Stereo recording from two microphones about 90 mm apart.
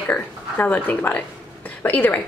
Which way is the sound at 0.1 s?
15° left (ahead or behind).